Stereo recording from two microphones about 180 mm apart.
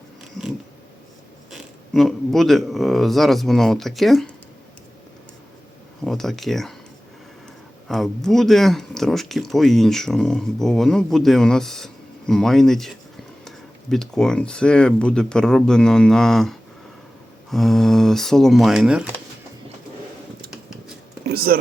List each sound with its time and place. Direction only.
1.5 s speech: centre (ahead or behind)
6.1 s speech: centre (ahead or behind)
7.9 s speech: centre (ahead or behind)
13.9 s speech: 5° left (ahead or behind)
21.2 s a sound: 60° right (ahead or behind)